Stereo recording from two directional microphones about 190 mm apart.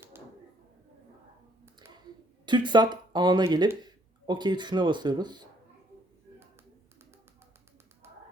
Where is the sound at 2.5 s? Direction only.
25° right (ahead or behind).